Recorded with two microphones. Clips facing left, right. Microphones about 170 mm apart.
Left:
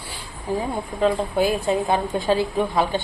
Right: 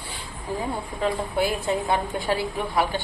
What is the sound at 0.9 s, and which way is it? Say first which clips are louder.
A woman's voice: left 5 dB; 20° left (ahead or behind).